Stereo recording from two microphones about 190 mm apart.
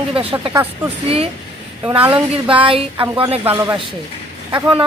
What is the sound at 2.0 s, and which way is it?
Speech, 10° right (ahead or behind).